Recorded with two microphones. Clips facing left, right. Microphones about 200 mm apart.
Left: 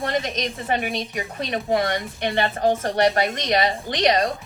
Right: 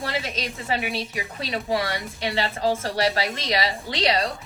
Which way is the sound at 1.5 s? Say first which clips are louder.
Left 3 dB; 50° left (ahead or behind).